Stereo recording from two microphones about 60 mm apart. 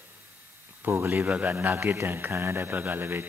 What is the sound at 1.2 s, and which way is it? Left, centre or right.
A man's voice, right.